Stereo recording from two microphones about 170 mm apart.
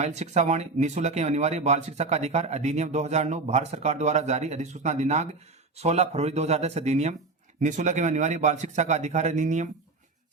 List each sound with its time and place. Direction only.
0.0 s a man's voice: 40° right (ahead or behind)